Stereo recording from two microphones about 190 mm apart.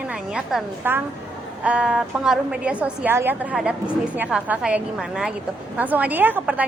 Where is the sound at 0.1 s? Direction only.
5° right (ahead or behind).